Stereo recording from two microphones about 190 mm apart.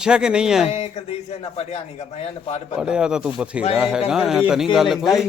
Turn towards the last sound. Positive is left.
turn(degrees=0)  # may be behind; listen again after turning